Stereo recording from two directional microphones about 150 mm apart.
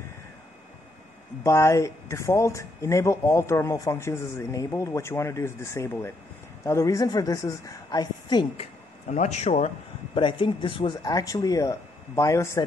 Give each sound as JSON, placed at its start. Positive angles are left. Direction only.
{"t": 1.4, "sound": "speech", "side_deg": 20}
{"t": 8.5, "sound": "speech", "side_deg": 50}
{"t": 10.1, "sound": "speech", "side_deg": 35}